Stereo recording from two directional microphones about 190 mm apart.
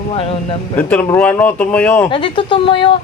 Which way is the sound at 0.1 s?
30° left (ahead or behind).